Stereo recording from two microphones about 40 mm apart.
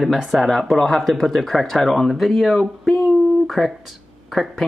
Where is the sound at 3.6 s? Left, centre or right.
Centre.